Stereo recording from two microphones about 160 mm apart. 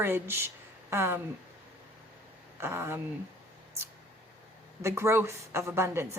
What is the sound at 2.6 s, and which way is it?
Speech, 15° right (ahead or behind).